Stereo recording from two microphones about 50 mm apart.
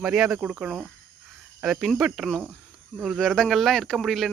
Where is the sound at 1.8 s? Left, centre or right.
Centre.